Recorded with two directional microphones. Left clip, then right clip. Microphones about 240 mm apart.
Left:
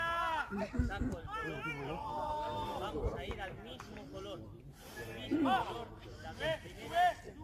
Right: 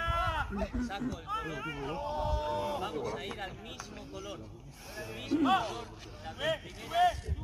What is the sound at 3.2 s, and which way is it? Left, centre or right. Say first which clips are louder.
Speech: right 3 dB; right.